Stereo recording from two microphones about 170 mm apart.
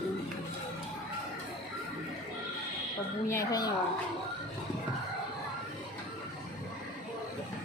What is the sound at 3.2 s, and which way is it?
Speech, 20° left (ahead or behind).